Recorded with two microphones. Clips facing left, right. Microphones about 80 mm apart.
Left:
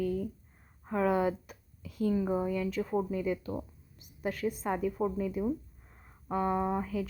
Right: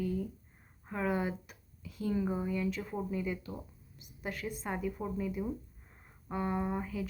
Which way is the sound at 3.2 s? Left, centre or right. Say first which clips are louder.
Left 5 dB; left.